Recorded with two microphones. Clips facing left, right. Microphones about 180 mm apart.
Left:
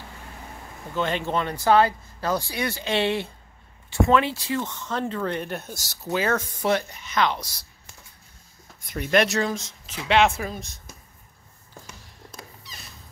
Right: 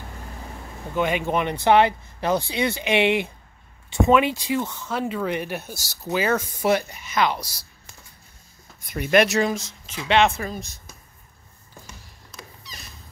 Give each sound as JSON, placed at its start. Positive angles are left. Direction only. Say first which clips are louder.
{"t": 0.9, "sound": "speech", "louder": "right 3 dB", "side_deg": -15}
{"t": 8.9, "sound": "speech", "louder": "right 3 dB", "side_deg": -10}